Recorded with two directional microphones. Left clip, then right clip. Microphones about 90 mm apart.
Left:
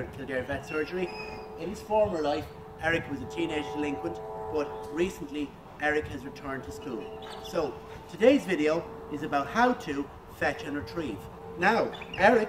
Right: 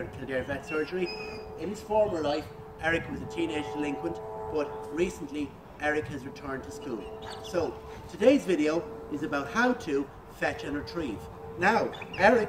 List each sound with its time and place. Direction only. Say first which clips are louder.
0.3 s a man's voice: right 1 dB; 40° left (ahead or behind)